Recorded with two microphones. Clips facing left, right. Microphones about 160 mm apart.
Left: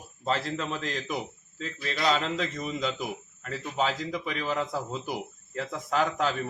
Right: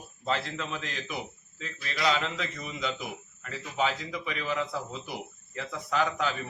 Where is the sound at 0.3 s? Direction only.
40° left (ahead or behind).